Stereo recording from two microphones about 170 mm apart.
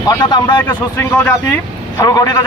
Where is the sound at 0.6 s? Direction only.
10° left (ahead or behind).